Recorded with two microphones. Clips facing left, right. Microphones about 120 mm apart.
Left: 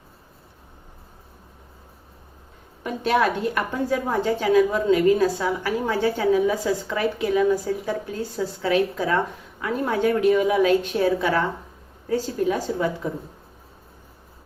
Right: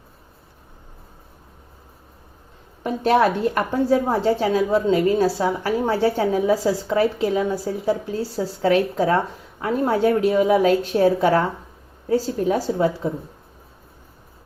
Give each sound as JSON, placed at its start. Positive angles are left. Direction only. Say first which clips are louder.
{"t": 2.8, "sound": "a woman's voice", "louder": "right 4 dB", "side_deg": -40}